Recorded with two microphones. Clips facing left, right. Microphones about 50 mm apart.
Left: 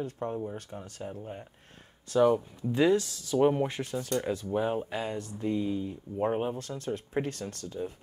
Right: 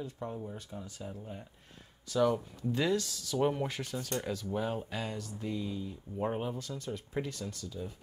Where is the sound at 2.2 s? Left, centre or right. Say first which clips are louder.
Left 5 dB; left.